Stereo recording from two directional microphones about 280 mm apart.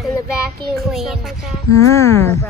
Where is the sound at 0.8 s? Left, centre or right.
Centre.